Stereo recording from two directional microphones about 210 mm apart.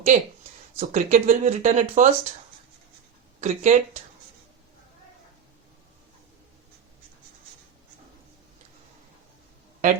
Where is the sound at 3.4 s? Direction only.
35° right (ahead or behind).